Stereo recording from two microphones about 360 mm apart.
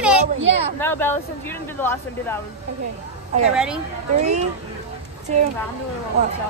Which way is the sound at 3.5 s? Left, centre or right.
Centre.